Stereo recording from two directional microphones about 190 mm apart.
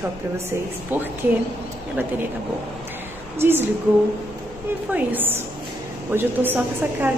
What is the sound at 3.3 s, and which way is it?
Speech, 10° right (ahead or behind).